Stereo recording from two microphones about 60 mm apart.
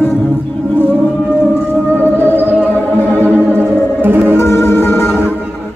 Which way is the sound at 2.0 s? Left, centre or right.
Left.